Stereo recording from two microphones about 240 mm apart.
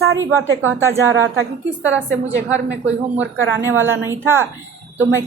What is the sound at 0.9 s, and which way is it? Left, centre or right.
A woman's voice, right.